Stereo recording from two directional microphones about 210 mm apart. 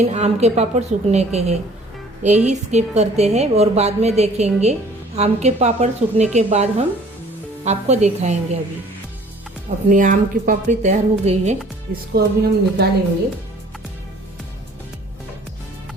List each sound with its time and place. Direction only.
0.0 s a woman's voice: 35° right (ahead or behind)
9.6 s a woman's voice: 40° right (ahead or behind)
12.1 s speech: 50° right (ahead or behind)